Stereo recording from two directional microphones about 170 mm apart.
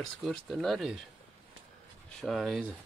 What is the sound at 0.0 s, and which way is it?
Speech, centre (ahead or behind).